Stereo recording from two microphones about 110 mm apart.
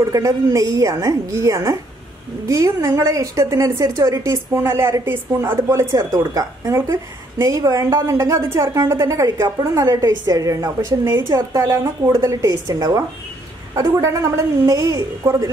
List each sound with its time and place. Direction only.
0.1 s a woman's voice: 30° right (ahead or behind)
11.7 s a woman's voice: 25° right (ahead or behind)